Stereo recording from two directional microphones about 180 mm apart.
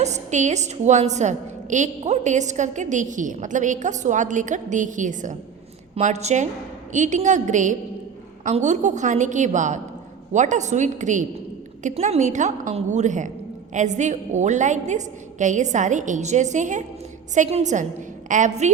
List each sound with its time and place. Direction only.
0.0 s a woman's voice: 40° right (ahead or behind)